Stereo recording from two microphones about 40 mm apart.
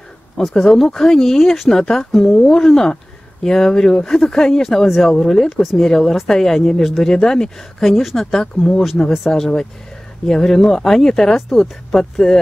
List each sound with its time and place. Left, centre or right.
0.4 s speech: centre
0.7 s speech: centre
4.8 s speech: centre
5.1 s speech: centre
7.9 s speech: centre
8.3 s speech: centre